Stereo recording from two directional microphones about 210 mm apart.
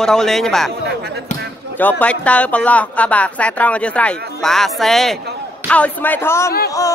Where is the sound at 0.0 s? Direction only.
5° left (ahead or behind).